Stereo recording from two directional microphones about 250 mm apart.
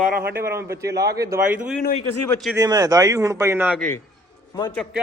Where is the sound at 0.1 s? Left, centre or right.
Right.